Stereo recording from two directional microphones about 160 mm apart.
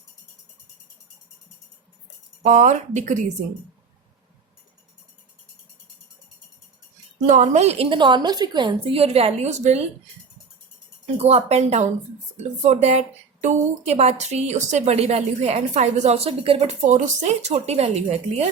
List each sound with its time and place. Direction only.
2.4 s a woman's voice: 50° right (ahead or behind)
7.3 s a woman's voice: 50° right (ahead or behind)
11.0 s a woman's voice: 40° right (ahead or behind)